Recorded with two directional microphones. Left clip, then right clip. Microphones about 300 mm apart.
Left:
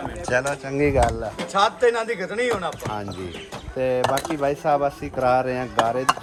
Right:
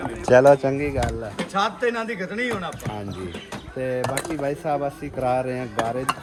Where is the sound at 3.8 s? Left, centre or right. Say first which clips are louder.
Left 4 dB; centre.